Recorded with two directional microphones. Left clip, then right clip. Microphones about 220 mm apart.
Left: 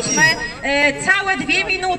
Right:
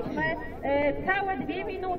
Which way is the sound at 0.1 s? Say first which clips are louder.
Left 17 dB; 15° left (ahead or behind).